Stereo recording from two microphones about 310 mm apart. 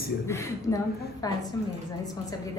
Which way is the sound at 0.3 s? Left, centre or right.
Centre.